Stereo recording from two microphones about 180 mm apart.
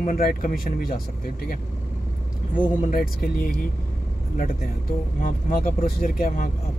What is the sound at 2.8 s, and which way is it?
Speech, 55° left (ahead or behind).